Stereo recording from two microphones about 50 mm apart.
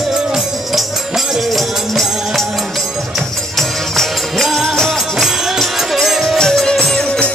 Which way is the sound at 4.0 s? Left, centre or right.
Centre.